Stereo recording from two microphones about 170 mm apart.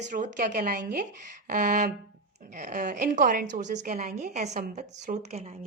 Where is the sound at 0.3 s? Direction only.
55° right (ahead or behind).